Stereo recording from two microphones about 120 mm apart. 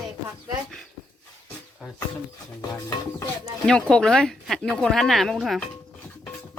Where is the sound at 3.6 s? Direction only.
5° left (ahead or behind).